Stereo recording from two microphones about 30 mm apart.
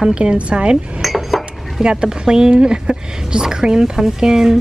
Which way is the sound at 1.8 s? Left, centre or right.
Right.